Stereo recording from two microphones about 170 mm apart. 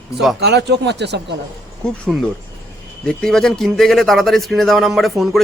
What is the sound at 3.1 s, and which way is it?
Speech, 5° left (ahead or behind).